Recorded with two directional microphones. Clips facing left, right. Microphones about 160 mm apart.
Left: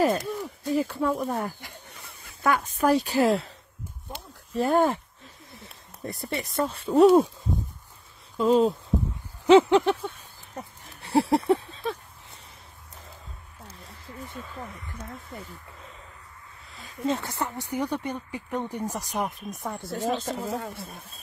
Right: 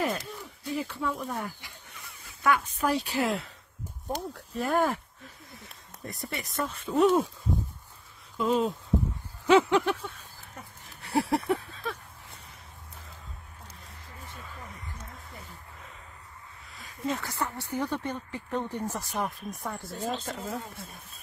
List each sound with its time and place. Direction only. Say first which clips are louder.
0.0 s speech: left 7 dB; 45° left (ahead or behind)
4.6 s a sound: left 5 dB; 30° left (ahead or behind)
6.0 s speech: left 5 dB; 30° left (ahead or behind)
8.4 s speech: left 6 dB; 35° left (ahead or behind)
9.5 s a sound: left 5 dB; 25° left (ahead or behind)
17.0 s speech: left 4 dB; 25° left (ahead or behind)
19.9 s speech: left 7 dB; 80° left
20.3 s speech: left 5 dB; 70° left (ahead or behind)